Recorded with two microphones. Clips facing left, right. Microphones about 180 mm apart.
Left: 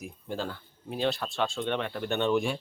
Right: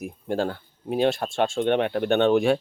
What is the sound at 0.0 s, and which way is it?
Speech, 60° right (ahead or behind).